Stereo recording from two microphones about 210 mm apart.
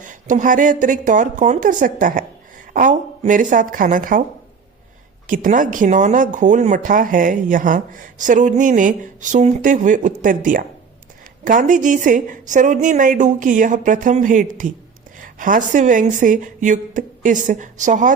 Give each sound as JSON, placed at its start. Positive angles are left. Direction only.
{"t": 0.0, "sound": "speech", "side_deg": -35}
{"t": 5.2, "sound": "speech", "side_deg": -40}